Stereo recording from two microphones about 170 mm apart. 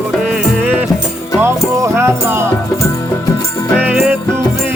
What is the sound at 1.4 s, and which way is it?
Music, 15° right (ahead or behind).